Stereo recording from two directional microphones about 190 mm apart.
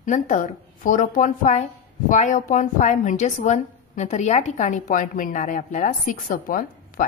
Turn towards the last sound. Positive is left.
turn(degrees=45)  # may be behind; listen again after turning